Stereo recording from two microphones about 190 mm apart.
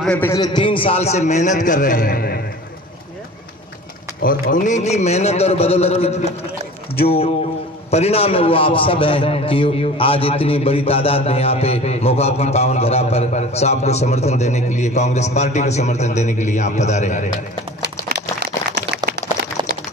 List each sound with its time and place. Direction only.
0.0 s a man's voice: 5° left (ahead or behind)
0.3 s a man's voice: 20° left (ahead or behind); by 2.4 s 50° left (ahead or behind)
4.2 s a man's voice: 45° left (ahead or behind)
18.0 s a sound: 55° right (ahead or behind)